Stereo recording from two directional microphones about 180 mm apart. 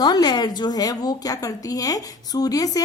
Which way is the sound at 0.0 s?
20° left (ahead or behind).